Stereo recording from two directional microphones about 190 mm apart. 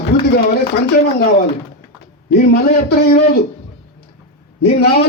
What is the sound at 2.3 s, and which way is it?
Speech, 55° left (ahead or behind).